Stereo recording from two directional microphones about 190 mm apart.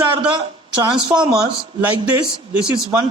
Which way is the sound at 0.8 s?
25° right (ahead or behind).